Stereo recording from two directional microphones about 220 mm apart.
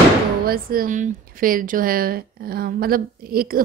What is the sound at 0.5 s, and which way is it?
A woman's voice, 40° right (ahead or behind).